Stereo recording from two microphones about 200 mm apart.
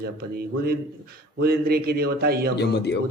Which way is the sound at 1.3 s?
50° right (ahead or behind).